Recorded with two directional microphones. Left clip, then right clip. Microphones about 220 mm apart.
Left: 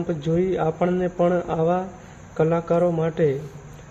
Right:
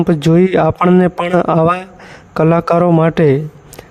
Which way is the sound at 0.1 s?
50° right (ahead or behind).